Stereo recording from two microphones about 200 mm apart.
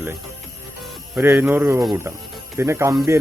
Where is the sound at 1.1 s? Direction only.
10° right (ahead or behind).